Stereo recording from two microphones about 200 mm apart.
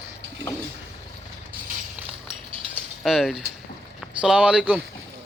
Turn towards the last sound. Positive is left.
turn(degrees=-5)  # may be behind; listen again after turning